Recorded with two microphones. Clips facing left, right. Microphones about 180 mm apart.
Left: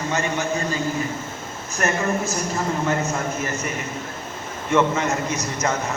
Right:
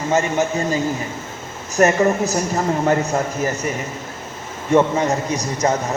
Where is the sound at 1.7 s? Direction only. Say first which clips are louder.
Right 8 dB; 40° right (ahead or behind).